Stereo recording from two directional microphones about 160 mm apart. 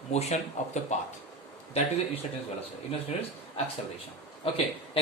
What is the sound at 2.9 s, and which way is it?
Speech, 40° left (ahead or behind).